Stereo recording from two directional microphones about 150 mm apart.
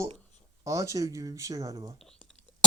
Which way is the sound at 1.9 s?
5° left (ahead or behind).